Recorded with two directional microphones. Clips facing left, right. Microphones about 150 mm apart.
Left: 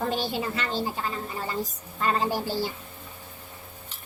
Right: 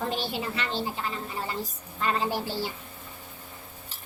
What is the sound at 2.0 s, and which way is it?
Speech, 40° left (ahead or behind).